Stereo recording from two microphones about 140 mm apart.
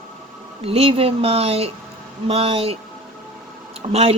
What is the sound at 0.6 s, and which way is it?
Speech, 45° right (ahead or behind).